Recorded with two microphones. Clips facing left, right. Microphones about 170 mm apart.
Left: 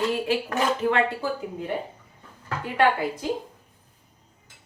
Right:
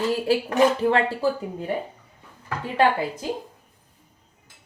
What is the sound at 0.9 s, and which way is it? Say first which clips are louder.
Speech: right 2 dB; 30° right (ahead or behind).